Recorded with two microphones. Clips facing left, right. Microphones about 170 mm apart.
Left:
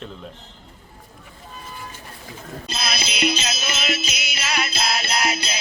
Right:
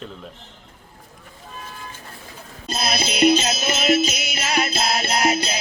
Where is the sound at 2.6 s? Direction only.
50° right (ahead or behind).